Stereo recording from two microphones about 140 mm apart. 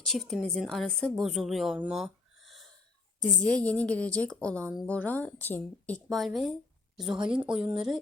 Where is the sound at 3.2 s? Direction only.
5° left (ahead or behind).